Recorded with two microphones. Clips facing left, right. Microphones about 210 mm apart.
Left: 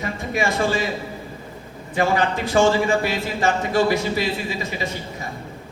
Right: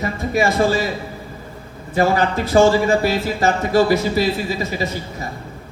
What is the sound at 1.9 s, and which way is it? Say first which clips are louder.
A man's voice: right 3 dB; 40° right (ahead or behind).